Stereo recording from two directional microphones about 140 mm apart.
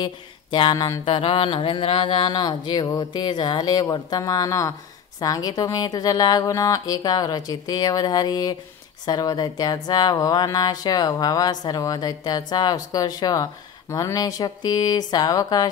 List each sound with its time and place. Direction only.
0.0 s mantra: 35° left (ahead or behind)
1.0 s mantra: 40° left (ahead or behind); by 4.7 s 20° left (ahead or behind)
5.2 s speech: 25° left (ahead or behind)